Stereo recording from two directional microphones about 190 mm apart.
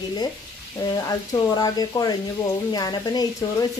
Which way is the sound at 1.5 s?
20° left (ahead or behind).